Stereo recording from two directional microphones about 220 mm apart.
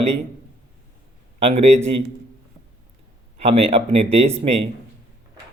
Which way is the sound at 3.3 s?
25° right (ahead or behind).